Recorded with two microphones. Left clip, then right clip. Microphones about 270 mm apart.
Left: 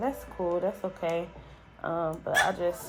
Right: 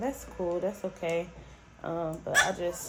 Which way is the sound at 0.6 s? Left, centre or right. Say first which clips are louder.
Left 2 dB; centre.